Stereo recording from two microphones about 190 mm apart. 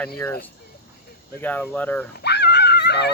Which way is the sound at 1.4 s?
10° left (ahead or behind).